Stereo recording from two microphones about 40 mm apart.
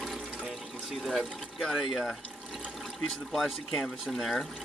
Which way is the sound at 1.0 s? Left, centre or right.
Centre.